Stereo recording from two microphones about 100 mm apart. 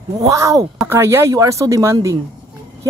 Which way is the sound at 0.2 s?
35° right (ahead or behind).